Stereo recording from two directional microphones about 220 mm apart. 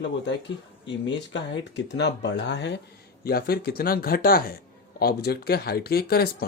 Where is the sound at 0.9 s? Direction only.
55° left (ahead or behind).